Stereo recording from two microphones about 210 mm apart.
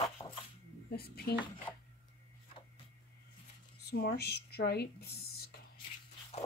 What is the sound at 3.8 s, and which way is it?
Speech, 50° left (ahead or behind).